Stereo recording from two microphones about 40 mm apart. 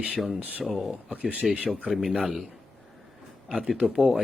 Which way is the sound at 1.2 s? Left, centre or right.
Right.